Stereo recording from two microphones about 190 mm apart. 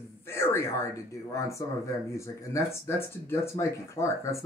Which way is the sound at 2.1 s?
15° left (ahead or behind).